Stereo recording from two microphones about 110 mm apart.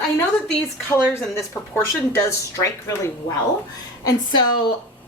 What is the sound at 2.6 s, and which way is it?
Speech, 30° left (ahead or behind).